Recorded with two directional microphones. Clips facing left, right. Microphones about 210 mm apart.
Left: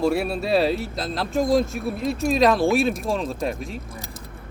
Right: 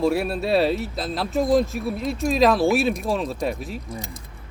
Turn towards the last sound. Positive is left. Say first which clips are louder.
# right 2 dB
turn(degrees=0)  # may be behind; listen again after turning